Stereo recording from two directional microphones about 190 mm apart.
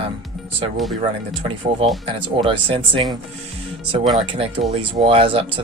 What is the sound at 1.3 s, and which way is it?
Speech, 30° right (ahead or behind).